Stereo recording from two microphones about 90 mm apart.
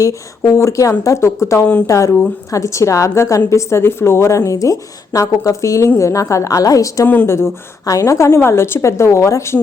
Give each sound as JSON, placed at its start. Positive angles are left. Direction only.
{"t": 0.0, "sound": "a woman's voice", "side_deg": 35}
{"t": 7.1, "sound": "a woman's voice", "side_deg": 25}